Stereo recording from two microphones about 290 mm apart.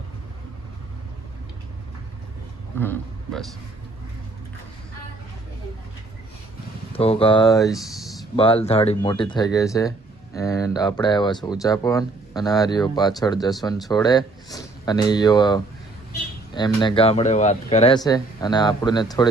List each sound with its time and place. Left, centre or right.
2.7 s a man's voice: centre
6.9 s speech: centre
7.7 s a sound: centre
8.4 s speech: centre